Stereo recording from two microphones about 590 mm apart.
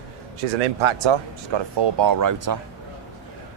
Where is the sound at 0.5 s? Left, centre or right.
Right.